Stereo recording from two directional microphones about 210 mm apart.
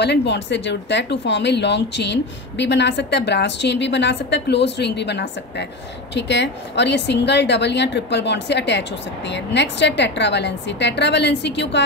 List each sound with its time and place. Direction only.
0.0 s speech: 55° left (ahead or behind)